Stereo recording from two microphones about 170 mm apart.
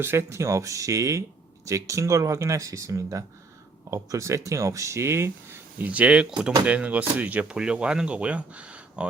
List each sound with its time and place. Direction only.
0.0 s speech: 15° right (ahead or behind)